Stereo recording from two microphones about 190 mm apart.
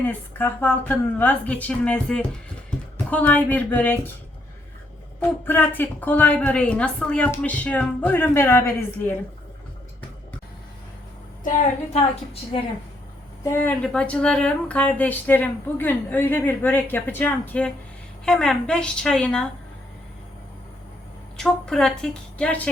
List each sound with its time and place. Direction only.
0.0 s speech: 10° left (ahead or behind)
5.5 s speech: 10° left (ahead or behind)
12.5 s a woman's voice: 25° left (ahead or behind)
13.4 s a woman's voice: 10° left (ahead or behind)
21.3 s a woman's voice: 5° left (ahead or behind)